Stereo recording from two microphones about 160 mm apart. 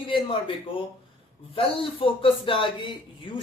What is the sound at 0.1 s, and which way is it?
Speech, 35° left (ahead or behind).